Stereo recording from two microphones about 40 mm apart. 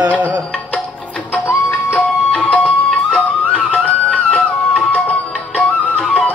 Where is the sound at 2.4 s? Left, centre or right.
Left.